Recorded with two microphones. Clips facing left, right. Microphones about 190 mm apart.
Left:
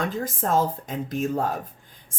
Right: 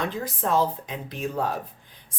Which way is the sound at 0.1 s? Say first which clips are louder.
Left 1 dB; 45° left (ahead or behind).